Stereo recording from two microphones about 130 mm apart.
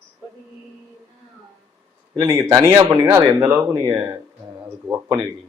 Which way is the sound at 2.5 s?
25° right (ahead or behind).